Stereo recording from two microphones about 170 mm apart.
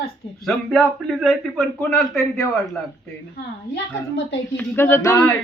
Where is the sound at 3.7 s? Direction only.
90° left.